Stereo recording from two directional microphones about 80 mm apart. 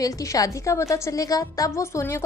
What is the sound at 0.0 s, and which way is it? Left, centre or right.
A woman's voice, left.